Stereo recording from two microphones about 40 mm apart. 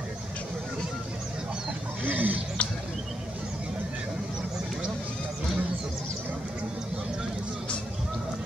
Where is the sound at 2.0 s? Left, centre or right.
Right.